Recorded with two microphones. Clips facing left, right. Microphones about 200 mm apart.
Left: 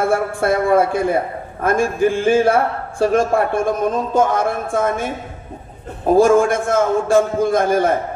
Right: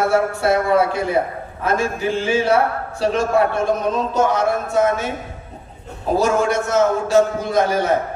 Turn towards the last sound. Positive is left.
turn(degrees=50)  # may be behind; listen again after turning